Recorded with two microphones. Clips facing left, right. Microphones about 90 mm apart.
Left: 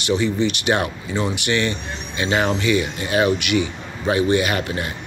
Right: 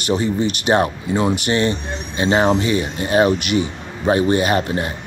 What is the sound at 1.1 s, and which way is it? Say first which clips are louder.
Speech: right 4 dB; 50° right (ahead or behind).